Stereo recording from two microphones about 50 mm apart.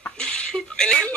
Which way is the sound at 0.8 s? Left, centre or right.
Centre.